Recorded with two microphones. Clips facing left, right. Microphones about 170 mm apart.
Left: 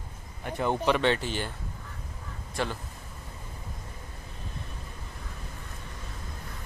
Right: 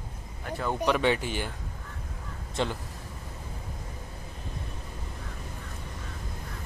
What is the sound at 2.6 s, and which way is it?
Speech, 20° right (ahead or behind).